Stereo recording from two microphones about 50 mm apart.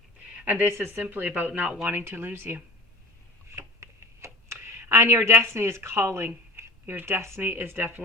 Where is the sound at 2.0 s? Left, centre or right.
Right.